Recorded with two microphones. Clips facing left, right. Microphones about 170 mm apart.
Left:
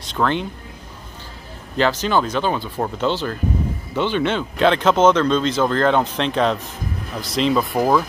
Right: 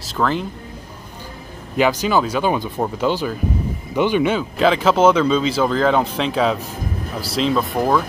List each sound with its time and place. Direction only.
0.0 s speech: 5° right (ahead or behind)
1.8 s speech: 10° right (ahead or behind)